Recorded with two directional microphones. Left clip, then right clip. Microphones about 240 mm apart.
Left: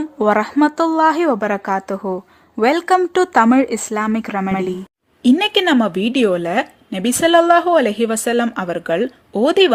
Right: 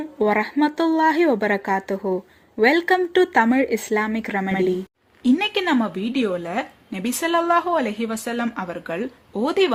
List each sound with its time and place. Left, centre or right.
0.2 s a woman's voice: centre
5.2 s a woman's voice: left